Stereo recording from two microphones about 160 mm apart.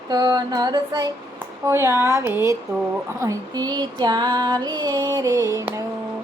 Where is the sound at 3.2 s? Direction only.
20° right (ahead or behind).